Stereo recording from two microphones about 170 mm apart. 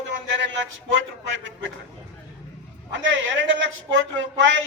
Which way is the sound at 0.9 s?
90° right.